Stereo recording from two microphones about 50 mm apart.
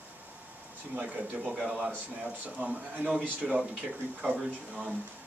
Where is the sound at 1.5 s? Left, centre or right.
Centre.